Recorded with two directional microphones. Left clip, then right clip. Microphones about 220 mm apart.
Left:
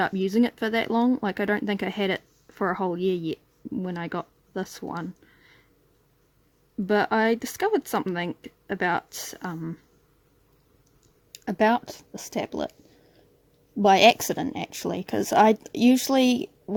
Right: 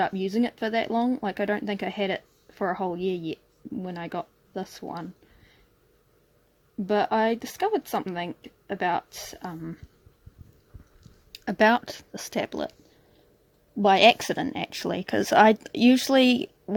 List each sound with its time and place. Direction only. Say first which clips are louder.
0.0 s speech: left 2 dB; 15° left (ahead or behind)
6.8 s speech: left 1 dB; 15° left (ahead or behind)
11.3 s speech: right 1 dB; 5° left (ahead or behind)
13.7 s speech: left 1 dB; 10° left (ahead or behind)